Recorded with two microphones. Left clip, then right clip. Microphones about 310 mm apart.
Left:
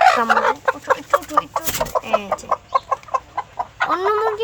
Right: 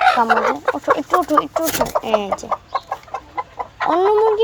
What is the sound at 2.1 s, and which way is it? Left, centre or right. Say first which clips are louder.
Speech: right 2 dB; centre.